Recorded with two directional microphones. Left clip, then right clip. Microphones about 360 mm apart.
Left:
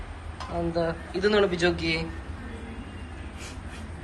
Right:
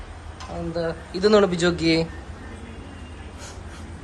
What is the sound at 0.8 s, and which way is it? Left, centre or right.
Speech, centre.